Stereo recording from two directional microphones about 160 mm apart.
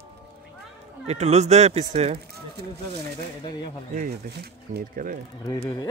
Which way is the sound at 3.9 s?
70° right (ahead or behind).